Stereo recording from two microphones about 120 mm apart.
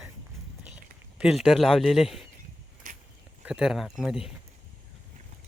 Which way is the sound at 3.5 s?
5° right (ahead or behind).